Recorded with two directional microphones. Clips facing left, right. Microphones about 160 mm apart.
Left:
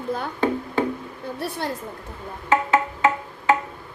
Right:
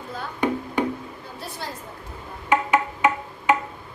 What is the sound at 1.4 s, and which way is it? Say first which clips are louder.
Speech: left 6 dB; 60° left (ahead or behind).